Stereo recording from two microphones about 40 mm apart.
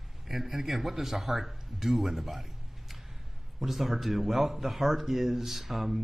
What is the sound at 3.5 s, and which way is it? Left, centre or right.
Speech, centre.